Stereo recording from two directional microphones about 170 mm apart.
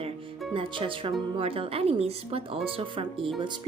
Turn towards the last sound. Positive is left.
turn(degrees=-30)  # may be behind; listen again after turning